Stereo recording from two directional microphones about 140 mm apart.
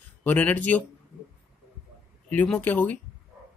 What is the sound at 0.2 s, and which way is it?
Speech, 10° left (ahead or behind).